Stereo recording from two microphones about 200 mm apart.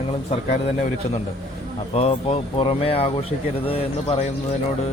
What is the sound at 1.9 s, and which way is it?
Speech, 30° left (ahead or behind).